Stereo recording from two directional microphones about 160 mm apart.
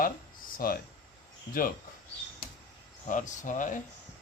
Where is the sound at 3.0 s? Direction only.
50° left (ahead or behind).